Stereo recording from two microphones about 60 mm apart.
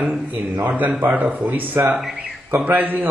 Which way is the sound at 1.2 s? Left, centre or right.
Right.